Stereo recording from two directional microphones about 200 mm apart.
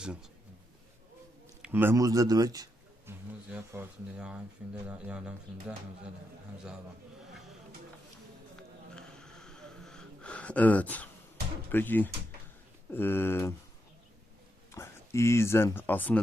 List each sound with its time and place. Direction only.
0.0 s a man's voice: 5° right (ahead or behind)
1.6 s speech: 10° right (ahead or behind)
8.5 s snort: 5° left (ahead or behind)
11.7 s speech: 10° left (ahead or behind)
14.7 s speech: 15° left (ahead or behind)